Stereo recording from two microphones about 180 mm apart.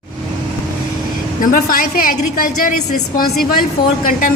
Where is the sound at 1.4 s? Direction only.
50° left (ahead or behind).